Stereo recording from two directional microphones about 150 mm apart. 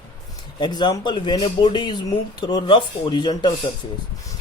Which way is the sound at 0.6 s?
30° left (ahead or behind).